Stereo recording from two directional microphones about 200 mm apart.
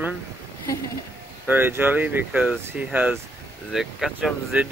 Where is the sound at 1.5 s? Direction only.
10° right (ahead or behind).